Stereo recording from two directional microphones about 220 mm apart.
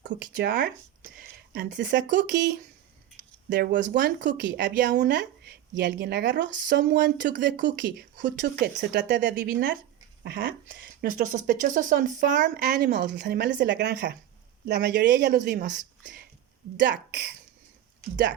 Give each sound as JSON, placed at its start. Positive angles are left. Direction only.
{"t": 0.1, "sound": "speech", "side_deg": -40}
{"t": 3.9, "sound": "speech", "side_deg": -40}
{"t": 4.3, "sound": "speech", "side_deg": -50}
{"t": 12.7, "sound": "speech", "side_deg": -45}
{"t": 15.4, "sound": "speech", "side_deg": -40}
{"t": 16.8, "sound": "speech", "side_deg": -50}